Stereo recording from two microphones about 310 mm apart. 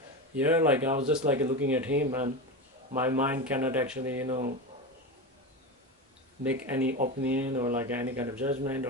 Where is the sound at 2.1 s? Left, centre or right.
Centre.